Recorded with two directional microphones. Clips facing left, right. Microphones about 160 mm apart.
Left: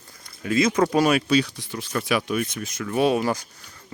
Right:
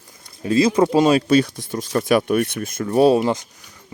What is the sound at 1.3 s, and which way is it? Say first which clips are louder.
Speech: right 5 dB; 50° right (ahead or behind).